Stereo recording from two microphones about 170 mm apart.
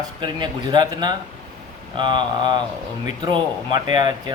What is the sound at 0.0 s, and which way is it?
Speech, 25° right (ahead or behind).